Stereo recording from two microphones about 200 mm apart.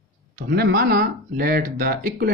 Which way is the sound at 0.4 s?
55° right (ahead or behind).